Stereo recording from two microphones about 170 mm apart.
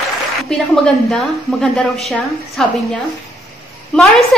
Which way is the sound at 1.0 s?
5° left (ahead or behind).